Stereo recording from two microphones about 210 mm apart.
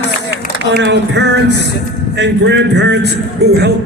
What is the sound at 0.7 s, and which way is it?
A man's voice, 55° right (ahead or behind).